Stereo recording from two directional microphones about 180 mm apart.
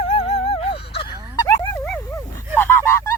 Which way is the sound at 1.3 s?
15° left (ahead or behind).